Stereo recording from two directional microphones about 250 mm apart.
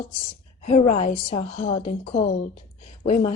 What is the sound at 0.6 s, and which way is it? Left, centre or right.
A woman's voice, left.